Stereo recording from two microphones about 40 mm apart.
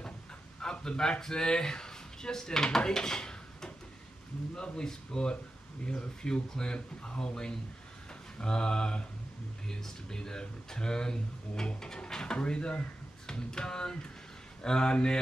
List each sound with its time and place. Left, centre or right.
0.6 s a sound: centre
1.2 s speech: centre
4.7 s speech: centre